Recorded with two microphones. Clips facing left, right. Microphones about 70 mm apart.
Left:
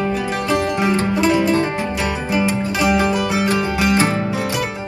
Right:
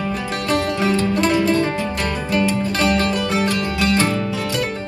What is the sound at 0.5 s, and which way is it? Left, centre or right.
Music, left.